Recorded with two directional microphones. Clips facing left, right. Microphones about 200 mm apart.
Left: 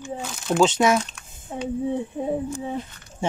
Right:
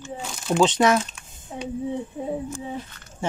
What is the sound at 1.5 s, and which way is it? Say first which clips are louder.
Speech: left 3 dB; 60° left (ahead or behind).